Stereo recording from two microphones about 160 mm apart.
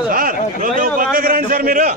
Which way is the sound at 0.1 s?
60° right (ahead or behind).